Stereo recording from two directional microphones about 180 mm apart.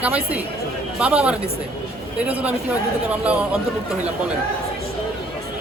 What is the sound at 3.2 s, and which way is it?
Speech, 5° right (ahead or behind).